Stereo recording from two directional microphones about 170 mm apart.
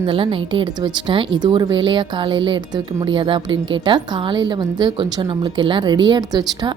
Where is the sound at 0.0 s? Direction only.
30° right (ahead or behind).